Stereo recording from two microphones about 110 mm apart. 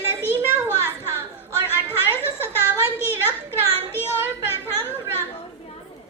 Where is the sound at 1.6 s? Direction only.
20° left (ahead or behind).